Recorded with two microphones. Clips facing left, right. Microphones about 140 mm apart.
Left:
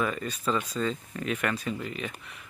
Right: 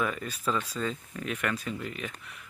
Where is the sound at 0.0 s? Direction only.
Centre (ahead or behind).